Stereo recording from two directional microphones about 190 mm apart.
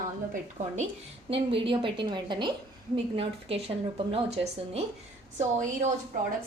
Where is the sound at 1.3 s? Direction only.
30° right (ahead or behind).